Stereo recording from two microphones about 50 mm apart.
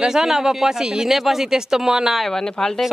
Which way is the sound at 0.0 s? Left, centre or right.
Centre.